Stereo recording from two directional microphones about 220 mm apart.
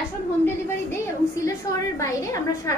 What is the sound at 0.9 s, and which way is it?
A woman's voice, 15° left (ahead or behind).